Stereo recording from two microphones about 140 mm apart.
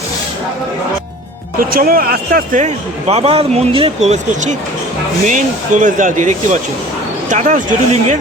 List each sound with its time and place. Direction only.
1.7 s a man's voice: 90° right; by 8.1 s 60° right (ahead or behind)